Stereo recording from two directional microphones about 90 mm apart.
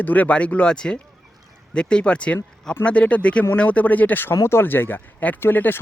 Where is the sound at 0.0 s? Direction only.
15° left (ahead or behind).